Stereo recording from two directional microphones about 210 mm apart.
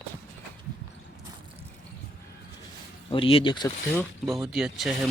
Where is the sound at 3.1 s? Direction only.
25° left (ahead or behind).